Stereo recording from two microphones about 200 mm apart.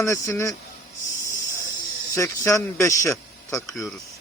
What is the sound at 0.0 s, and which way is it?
Speech, 15° left (ahead or behind).